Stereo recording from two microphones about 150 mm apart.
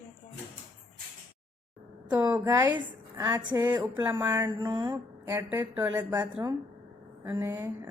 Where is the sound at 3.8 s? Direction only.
15° right (ahead or behind).